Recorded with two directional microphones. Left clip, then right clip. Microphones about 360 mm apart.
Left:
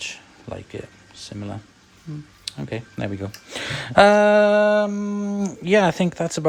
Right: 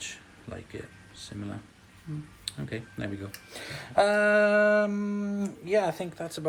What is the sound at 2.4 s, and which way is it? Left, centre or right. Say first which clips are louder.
Speech: left 7 dB; centre.